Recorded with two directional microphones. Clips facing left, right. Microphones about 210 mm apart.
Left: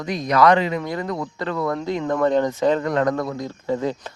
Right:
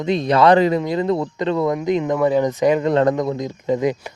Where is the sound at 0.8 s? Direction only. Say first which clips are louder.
Right 6 dB; 20° right (ahead or behind).